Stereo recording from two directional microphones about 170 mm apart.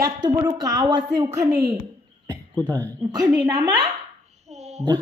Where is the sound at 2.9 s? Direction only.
20° right (ahead or behind).